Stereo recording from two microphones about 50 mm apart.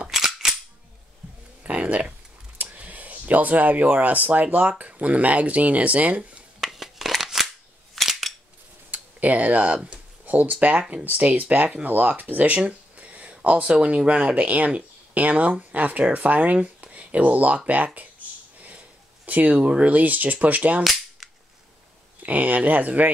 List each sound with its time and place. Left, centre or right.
0.1 s cap gun: centre
1.6 s speech: right
6.6 s shuffling cards: centre
7.9 s cap gun: centre
8.9 s a sound: right
9.8 s speech: right
22.2 s speech: right